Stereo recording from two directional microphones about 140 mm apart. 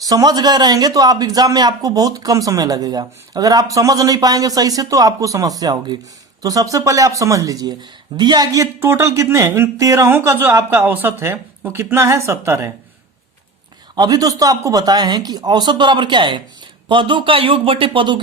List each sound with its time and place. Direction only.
0.0 s speech: 25° right (ahead or behind)
13.9 s speech: 25° right (ahead or behind)